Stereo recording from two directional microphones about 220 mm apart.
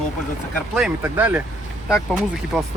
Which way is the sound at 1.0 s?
10° right (ahead or behind).